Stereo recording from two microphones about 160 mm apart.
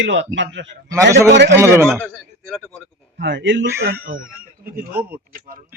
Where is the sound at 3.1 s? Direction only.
90° right.